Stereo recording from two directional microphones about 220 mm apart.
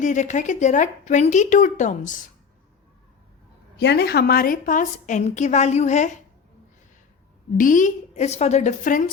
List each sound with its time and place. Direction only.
0.0 s a woman's voice: 35° left (ahead or behind)
3.8 s a woman's voice: 50° left (ahead or behind); by 6.1 s 30° left (ahead or behind)
7.5 s a woman's voice: 35° left (ahead or behind)